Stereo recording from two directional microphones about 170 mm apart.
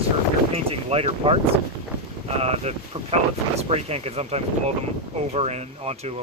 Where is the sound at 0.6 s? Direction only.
35° right (ahead or behind).